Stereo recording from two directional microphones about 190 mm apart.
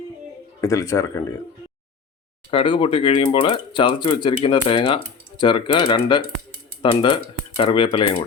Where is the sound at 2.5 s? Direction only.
25° left (ahead or behind).